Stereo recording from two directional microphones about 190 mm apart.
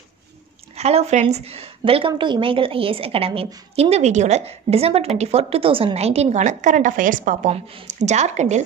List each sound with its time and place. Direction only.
0.7 s a woman's voice: 35° right (ahead or behind)